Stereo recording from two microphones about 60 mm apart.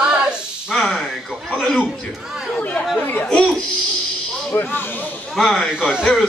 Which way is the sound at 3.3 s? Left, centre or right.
Centre.